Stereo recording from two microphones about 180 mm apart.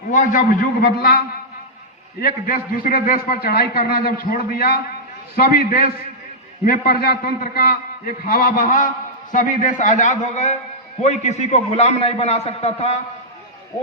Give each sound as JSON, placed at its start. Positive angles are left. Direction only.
{"t": 0.1, "sound": "a man's voice", "side_deg": 45}
{"t": 2.2, "sound": "a man's voice", "side_deg": 50}